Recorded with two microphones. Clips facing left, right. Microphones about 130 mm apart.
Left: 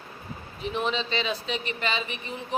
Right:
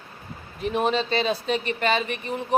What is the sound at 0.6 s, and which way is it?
Speech, 50° right (ahead or behind).